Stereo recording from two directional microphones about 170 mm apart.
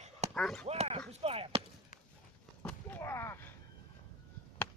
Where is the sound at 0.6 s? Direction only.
40° right (ahead or behind).